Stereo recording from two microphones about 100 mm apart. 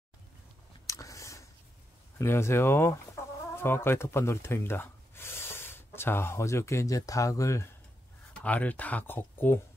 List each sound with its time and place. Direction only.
0.8 s a sound: 30° left (ahead or behind)
2.1 s speech: 25° left (ahead or behind)
8.3 s speech: 15° left (ahead or behind)